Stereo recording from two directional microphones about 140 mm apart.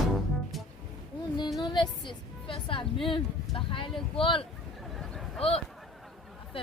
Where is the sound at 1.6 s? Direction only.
35° left (ahead or behind).